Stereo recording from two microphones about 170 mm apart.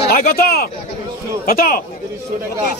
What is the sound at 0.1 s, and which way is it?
A man's voice, 60° left (ahead or behind).